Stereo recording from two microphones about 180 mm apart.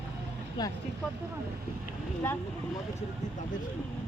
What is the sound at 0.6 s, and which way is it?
Speech, 25° left (ahead or behind).